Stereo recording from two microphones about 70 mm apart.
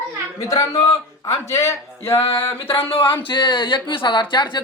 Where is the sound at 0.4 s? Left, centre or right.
Left.